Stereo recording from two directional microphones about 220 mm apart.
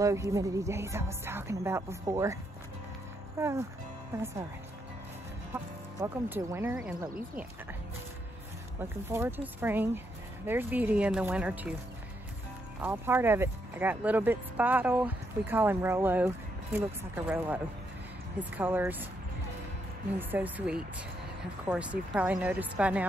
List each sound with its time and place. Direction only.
0.0 s speech: 15° right (ahead or behind)
3.3 s speech: 10° right (ahead or behind)
5.5 s speech: 10° right (ahead or behind)
8.8 s speech: 10° right (ahead or behind)
12.8 s speech: 10° right (ahead or behind)
20.2 s speech: 10° right (ahead or behind)